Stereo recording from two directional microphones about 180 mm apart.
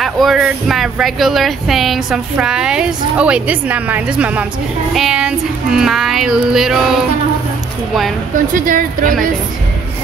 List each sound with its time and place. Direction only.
0.0 s speech: centre (ahead or behind)
8.6 s speech: 50° right (ahead or behind)